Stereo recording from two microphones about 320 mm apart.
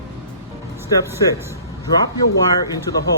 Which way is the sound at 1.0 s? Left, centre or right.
Centre.